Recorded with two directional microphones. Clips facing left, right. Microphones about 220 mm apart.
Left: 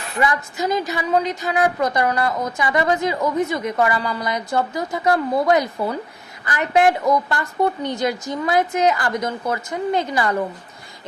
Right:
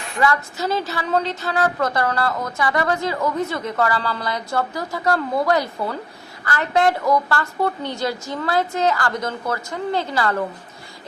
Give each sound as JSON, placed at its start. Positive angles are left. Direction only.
{"t": 0.2, "sound": "a woman's voice", "side_deg": 15}